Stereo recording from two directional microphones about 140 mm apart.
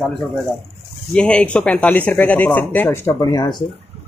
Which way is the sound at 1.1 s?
5° left (ahead or behind).